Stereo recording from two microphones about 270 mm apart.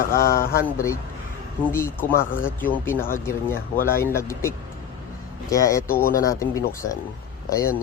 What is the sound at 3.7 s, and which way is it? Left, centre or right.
Speech, left.